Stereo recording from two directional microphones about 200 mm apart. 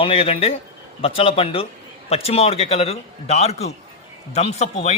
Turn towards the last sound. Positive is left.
turn(degrees=35)  # may be behind; listen again after turning